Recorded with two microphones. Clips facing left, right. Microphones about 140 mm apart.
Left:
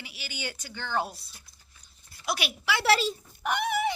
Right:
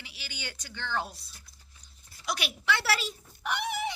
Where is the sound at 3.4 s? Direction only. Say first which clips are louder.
Left 4 dB; 50° left (ahead or behind).